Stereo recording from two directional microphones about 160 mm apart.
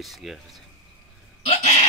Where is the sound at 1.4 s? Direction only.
45° left (ahead or behind).